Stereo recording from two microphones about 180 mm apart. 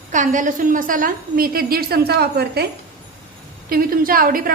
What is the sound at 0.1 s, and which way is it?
A woman's voice, 45° right (ahead or behind).